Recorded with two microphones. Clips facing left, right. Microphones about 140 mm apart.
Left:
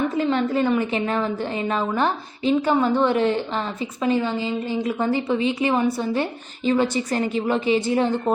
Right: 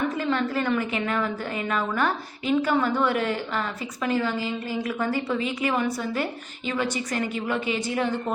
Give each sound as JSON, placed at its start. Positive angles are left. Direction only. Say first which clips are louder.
{"t": 0.3, "sound": "a woman's voice", "louder": "left 4 dB", "side_deg": 20}